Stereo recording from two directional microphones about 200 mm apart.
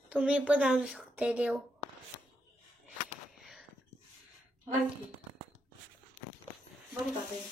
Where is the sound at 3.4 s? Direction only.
Centre (ahead or behind).